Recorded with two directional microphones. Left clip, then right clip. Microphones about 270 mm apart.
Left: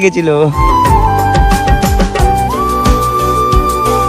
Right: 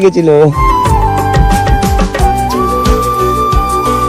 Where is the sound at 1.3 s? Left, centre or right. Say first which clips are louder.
Even; centre.